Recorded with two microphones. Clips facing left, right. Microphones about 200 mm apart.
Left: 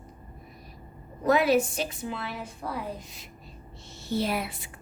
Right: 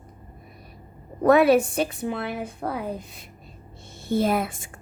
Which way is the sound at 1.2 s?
60° right (ahead or behind).